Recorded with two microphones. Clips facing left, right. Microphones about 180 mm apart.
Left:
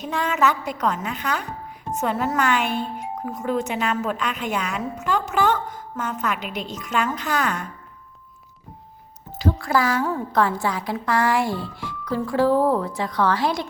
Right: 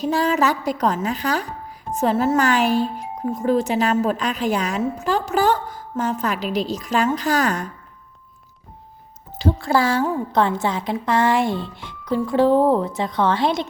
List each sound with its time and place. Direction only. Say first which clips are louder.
0.0 s a woman's voice: right 3 dB; 35° right (ahead or behind)
9.4 s speech: right 2 dB; 25° right (ahead or behind)